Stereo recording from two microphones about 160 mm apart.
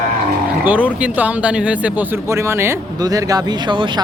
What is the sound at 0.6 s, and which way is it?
Speech, 10° right (ahead or behind).